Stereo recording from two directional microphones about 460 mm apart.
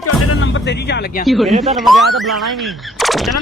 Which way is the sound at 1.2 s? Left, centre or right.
Centre.